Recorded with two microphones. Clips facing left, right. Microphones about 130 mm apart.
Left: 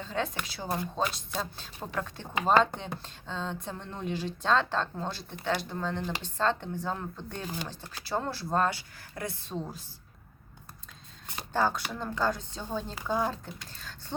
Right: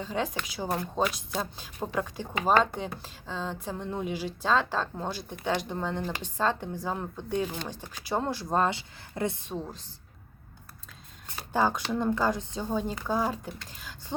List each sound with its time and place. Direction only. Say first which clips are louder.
0.0 s speech: right 2 dB; 10° right (ahead or behind)
11.3 s shuffling cards: right 2 dB; 15° right (ahead or behind)
11.9 s speech: right 4 dB; 20° right (ahead or behind)